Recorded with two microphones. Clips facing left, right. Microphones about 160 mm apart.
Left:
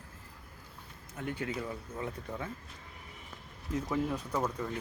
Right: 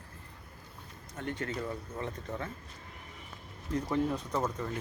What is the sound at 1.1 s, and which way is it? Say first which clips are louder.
Speech: even; 5° left (ahead or behind).